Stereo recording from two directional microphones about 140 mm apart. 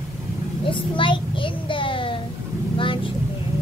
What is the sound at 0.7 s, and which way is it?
A child's voice, 35° left (ahead or behind).